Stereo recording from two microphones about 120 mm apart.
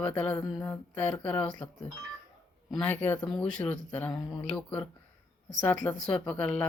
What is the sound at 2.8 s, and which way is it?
Speech, 15° left (ahead or behind).